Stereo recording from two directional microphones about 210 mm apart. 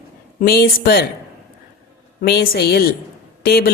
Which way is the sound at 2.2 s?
45° left (ahead or behind).